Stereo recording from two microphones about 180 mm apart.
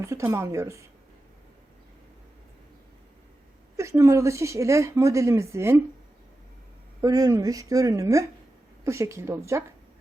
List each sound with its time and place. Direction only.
0.0 s speech: 15° right (ahead or behind)
3.8 s a woman's voice: 15° right (ahead or behind)
7.0 s a woman's voice: 20° right (ahead or behind)